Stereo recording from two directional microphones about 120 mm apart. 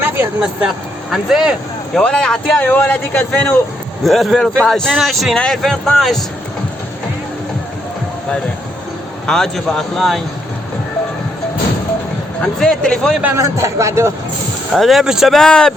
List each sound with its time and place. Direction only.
0.0 s vehicle: 15° right (ahead or behind)
1.1 s speech: 5° right (ahead or behind)
2.0 s speech: 5° left (ahead or behind)
9.2 s speech: 5° left (ahead or behind)
12.4 s speech: 5° left (ahead or behind)
13.3 s speech: 25° right (ahead or behind)
14.8 s speech: centre (ahead or behind)